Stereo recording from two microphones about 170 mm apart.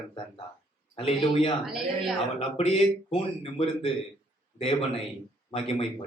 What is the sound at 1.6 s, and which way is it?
Speech, 5° right (ahead or behind).